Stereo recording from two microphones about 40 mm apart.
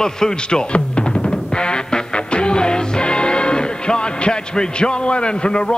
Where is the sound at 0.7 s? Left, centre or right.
Left.